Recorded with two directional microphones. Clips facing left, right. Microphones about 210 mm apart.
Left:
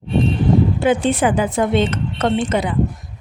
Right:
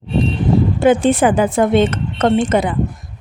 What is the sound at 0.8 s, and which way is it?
Speech, 50° right (ahead or behind).